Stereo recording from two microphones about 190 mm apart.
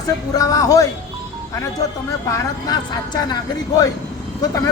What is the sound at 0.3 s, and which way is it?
Speech, 20° left (ahead or behind).